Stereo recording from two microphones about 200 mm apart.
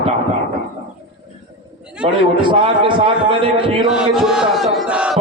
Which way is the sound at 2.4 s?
25° right (ahead or behind).